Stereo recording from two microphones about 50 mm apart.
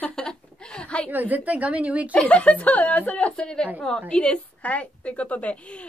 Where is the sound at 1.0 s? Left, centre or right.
Right.